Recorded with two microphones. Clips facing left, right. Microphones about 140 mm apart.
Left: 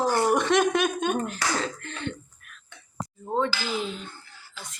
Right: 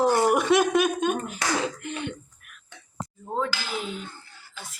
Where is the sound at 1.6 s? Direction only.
15° right (ahead or behind).